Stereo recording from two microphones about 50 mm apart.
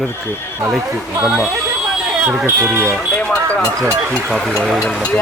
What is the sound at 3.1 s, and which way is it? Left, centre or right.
Speech, left.